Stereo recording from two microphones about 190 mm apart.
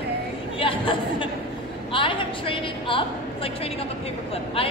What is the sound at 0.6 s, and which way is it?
A woman's voice, 25° left (ahead or behind).